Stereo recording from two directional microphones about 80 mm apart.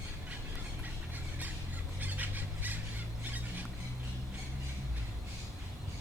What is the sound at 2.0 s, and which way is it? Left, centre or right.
Fowl, right.